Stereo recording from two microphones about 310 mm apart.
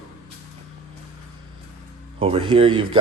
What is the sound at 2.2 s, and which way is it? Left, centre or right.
Speech, centre.